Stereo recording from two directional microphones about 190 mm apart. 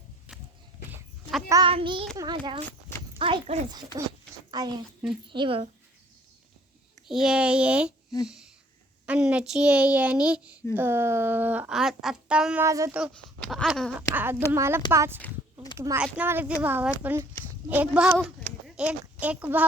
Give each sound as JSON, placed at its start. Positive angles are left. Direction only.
{"t": 0.3, "sound": "walk", "side_deg": -5}
{"t": 0.9, "sound": "sheep", "side_deg": 0}
{"t": 1.5, "sound": "a child's voice", "side_deg": -20}
{"t": 4.5, "sound": "a child's voice", "side_deg": -20}
{"t": 7.1, "sound": "a child's voice", "side_deg": -5}
{"t": 9.0, "sound": "a child's voice", "side_deg": -5}
{"t": 12.6, "sound": "speech", "side_deg": -15}
{"t": 13.5, "sound": "a child's voice", "side_deg": 0}